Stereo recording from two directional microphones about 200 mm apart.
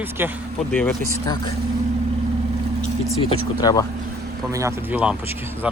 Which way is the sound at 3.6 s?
20° left (ahead or behind).